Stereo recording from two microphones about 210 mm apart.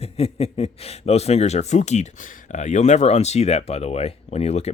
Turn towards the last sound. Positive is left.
turn(degrees=30)  # may be behind; listen again after turning